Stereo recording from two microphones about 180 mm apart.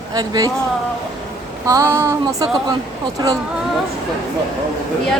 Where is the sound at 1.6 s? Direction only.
15° right (ahead or behind).